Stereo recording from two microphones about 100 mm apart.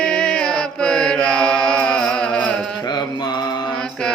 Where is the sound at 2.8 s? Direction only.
45° left (ahead or behind).